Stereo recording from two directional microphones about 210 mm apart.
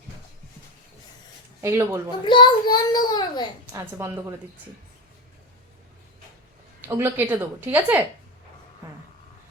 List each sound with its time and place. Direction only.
1.6 s speech: 10° right (ahead or behind)
2.2 s a child's voice: 20° left (ahead or behind)
3.7 s speech: 15° right (ahead or behind)
6.8 s speech: 10° right (ahead or behind)